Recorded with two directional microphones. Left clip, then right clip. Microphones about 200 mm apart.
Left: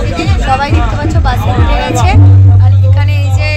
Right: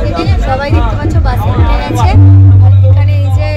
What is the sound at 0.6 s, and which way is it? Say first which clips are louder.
Music: left 1 dB; 25° left (ahead or behind).